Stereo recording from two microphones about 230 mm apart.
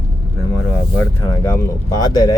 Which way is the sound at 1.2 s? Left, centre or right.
Centre.